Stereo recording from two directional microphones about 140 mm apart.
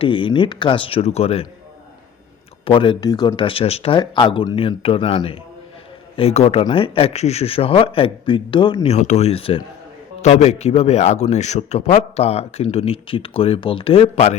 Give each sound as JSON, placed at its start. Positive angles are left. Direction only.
{"t": 0.0, "sound": "speech", "side_deg": 35}
{"t": 2.6, "sound": "speech", "side_deg": 40}
{"t": 8.9, "sound": "speech", "side_deg": 55}
{"t": 10.2, "sound": "speech", "side_deg": 55}